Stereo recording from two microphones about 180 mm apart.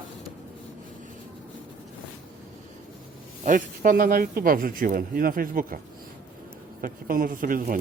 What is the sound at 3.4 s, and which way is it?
Speech, 45° right (ahead or behind).